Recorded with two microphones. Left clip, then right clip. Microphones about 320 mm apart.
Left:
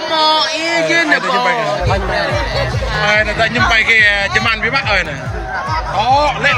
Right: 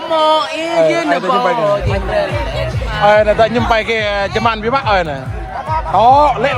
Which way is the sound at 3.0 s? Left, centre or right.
Centre.